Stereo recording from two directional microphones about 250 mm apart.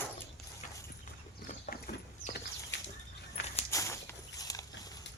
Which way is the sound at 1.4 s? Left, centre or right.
Left.